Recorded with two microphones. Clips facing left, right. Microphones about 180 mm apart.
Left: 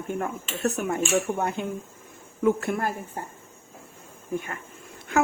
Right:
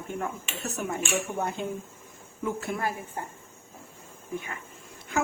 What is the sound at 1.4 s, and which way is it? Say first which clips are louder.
Speech: left 2 dB; 60° left (ahead or behind).